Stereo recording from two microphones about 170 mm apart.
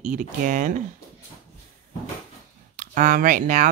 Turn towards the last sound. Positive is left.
turn(degrees=-45)  # may be behind; listen again after turning